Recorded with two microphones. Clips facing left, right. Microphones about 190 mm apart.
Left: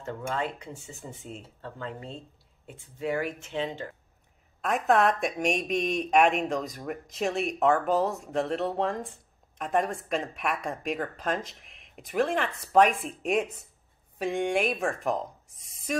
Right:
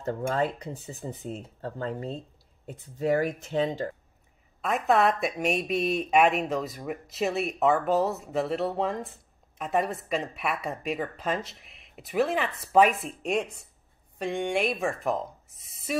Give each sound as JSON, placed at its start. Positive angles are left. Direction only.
{"t": 0.0, "sound": "speech", "side_deg": -40}
{"t": 4.6, "sound": "speech", "side_deg": 0}